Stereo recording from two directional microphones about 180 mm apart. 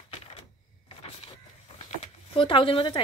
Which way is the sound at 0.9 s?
30° left (ahead or behind).